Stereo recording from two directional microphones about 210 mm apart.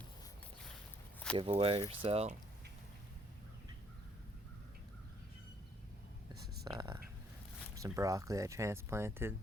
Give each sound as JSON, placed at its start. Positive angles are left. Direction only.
{"t": 1.4, "sound": "speech", "side_deg": -25}
{"t": 6.7, "sound": "speech", "side_deg": -20}